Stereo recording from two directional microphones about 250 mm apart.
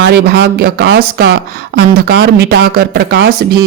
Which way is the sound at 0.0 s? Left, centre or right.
Right.